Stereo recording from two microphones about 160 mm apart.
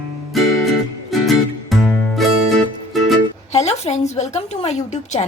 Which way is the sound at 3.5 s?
45° left (ahead or behind).